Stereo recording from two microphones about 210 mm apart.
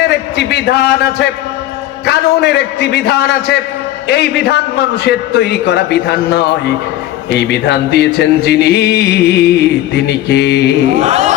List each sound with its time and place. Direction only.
0.0 s a man's voice: 50° left (ahead or behind)
2.0 s music: 50° left (ahead or behind)
10.9 s a man's voice: 35° right (ahead or behind)